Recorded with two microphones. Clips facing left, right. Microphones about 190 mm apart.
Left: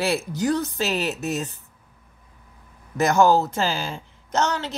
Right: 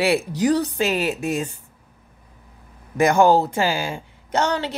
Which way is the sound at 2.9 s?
15° right (ahead or behind).